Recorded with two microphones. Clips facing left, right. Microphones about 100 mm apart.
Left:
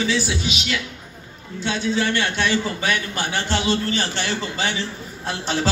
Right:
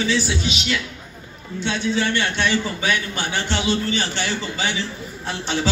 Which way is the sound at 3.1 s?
40° left (ahead or behind).